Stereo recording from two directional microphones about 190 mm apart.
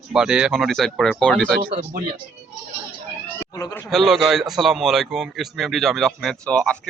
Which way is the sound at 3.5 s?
20° left (ahead or behind).